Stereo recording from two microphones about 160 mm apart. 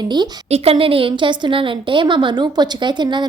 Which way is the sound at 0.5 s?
40° right (ahead or behind).